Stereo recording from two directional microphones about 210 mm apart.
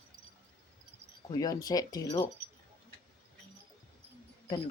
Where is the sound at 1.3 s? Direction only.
20° left (ahead or behind).